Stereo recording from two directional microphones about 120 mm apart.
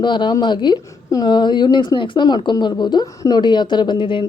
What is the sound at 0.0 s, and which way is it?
A woman's voice, 40° left (ahead or behind).